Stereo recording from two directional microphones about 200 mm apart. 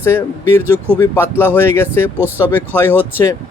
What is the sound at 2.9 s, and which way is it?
Speech, 10° right (ahead or behind).